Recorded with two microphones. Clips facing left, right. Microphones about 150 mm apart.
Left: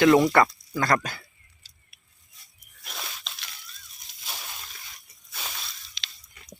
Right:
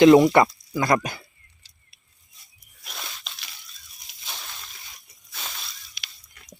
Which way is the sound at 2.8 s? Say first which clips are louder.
Even; centre (ahead or behind).